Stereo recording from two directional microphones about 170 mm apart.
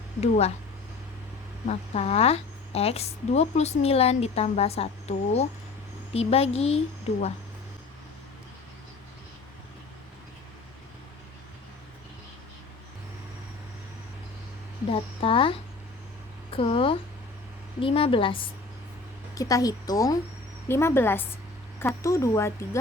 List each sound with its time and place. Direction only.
0.2 s a woman's voice: 40° left (ahead or behind)
1.6 s a woman's voice: 40° left (ahead or behind)
14.8 s a woman's voice: 35° left (ahead or behind)
19.3 s speech: 20° left (ahead or behind)